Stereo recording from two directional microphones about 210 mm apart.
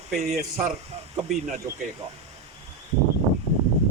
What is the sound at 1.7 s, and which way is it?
Speech, 10° right (ahead or behind).